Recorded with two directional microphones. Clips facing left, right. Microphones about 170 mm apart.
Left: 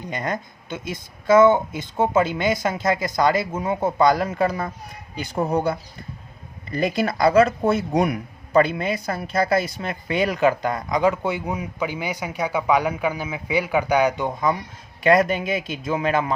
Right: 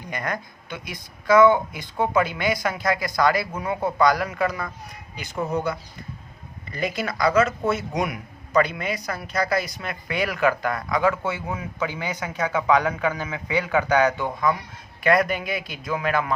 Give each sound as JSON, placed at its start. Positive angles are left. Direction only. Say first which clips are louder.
{"t": 0.0, "sound": "speech", "louder": "left 3 dB", "side_deg": 20}